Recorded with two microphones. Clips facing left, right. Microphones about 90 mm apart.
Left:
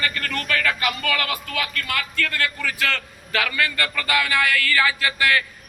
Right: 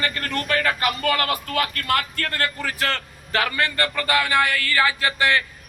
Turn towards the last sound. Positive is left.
turn(degrees=-25)  # may be behind; listen again after turning